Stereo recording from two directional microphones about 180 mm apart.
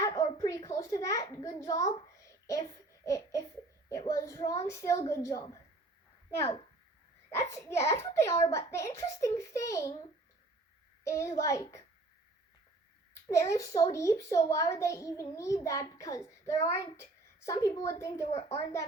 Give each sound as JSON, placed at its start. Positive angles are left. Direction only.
{"t": 0.0, "sound": "a sound", "side_deg": 20}
{"t": 3.8, "sound": "child singing", "side_deg": 15}
{"t": 4.7, "sound": "a child's voice", "side_deg": 15}
{"t": 7.3, "sound": "a child's voice", "side_deg": 15}
{"t": 11.0, "sound": "a child's voice", "side_deg": 15}
{"t": 13.2, "sound": "a child's voice", "side_deg": 15}
{"t": 18.3, "sound": "a child's voice", "side_deg": 35}
{"t": 18.5, "sound": "a child's voice", "side_deg": 15}